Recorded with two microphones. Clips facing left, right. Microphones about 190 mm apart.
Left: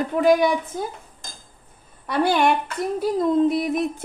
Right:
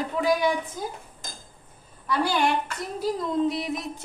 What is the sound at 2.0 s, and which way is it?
A woman's voice, 60° left (ahead or behind).